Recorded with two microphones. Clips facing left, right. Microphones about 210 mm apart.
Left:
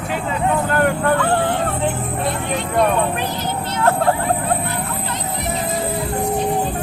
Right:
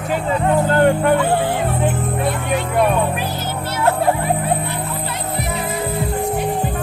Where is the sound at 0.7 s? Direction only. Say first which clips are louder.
Right 4 dB; 25° right (ahead or behind).